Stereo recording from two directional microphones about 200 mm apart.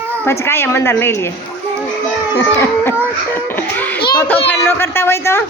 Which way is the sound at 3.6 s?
10° left (ahead or behind).